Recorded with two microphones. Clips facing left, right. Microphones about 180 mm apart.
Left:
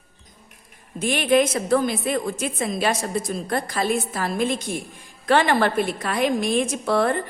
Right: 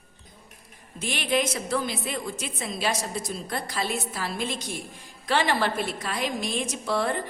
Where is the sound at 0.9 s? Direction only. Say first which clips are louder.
Left 8 dB; 50° left (ahead or behind).